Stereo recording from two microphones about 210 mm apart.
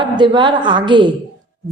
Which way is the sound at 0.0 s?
20° right (ahead or behind).